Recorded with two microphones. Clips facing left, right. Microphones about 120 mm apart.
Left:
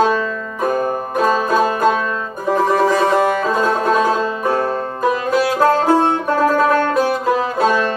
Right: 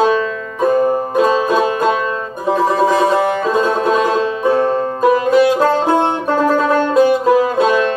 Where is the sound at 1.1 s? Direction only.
20° right (ahead or behind).